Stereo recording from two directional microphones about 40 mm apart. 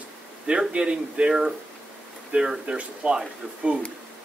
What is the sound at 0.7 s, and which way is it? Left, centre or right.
Speech, right.